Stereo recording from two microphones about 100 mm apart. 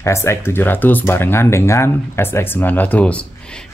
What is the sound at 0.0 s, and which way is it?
Speech, 30° left (ahead or behind).